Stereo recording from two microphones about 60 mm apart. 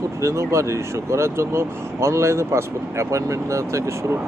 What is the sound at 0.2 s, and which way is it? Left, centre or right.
Speech, right.